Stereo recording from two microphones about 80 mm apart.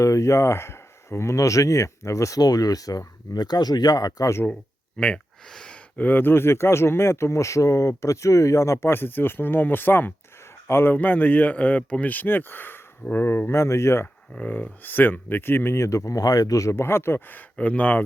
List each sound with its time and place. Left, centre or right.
0.0 s speech: left
3.3 s speech: left
4.9 s speech: centre
6.0 s speech: left
14.3 s speech: left